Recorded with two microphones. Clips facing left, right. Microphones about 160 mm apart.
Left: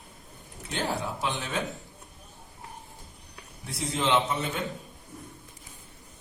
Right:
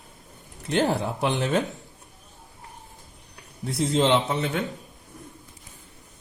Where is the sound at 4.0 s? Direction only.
75° right (ahead or behind).